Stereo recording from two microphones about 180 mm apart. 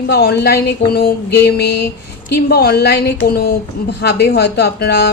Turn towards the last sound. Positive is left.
turn(degrees=65)  # may be behind; listen again after turning